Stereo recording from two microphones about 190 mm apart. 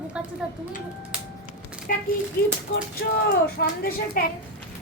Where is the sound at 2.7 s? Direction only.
40° left (ahead or behind).